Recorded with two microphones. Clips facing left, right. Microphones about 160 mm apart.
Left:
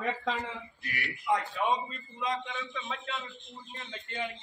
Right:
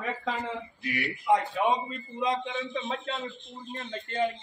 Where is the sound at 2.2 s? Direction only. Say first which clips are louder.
Right 5 dB; 30° right (ahead or behind).